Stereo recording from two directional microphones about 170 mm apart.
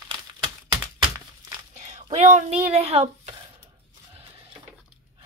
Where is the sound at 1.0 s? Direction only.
20° right (ahead or behind).